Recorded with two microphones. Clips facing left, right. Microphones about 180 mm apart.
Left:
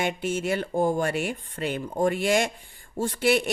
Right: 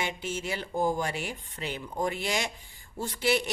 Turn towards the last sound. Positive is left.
turn(degrees=50)  # may be behind; listen again after turning